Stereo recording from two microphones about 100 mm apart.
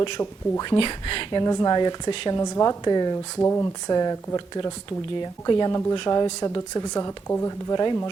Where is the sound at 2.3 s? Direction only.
35° left (ahead or behind).